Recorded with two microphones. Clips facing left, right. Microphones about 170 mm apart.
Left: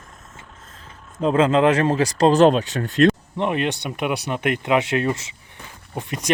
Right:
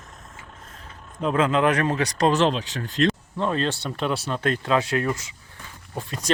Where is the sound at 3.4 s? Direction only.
15° left (ahead or behind).